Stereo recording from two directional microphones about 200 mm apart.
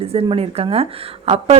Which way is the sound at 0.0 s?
30° right (ahead or behind).